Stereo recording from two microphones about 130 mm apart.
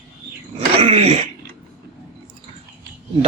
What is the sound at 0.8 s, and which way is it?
Dog, 50° right (ahead or behind).